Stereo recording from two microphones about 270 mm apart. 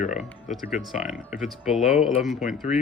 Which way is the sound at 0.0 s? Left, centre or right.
Left.